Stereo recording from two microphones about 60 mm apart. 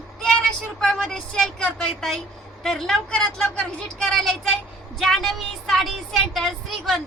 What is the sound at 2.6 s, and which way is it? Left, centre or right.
Speech, centre.